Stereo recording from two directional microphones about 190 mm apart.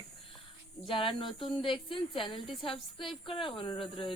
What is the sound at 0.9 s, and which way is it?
Speech, 25° left (ahead or behind).